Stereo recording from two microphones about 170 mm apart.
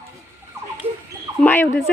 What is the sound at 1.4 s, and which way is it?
Speech, 10° left (ahead or behind).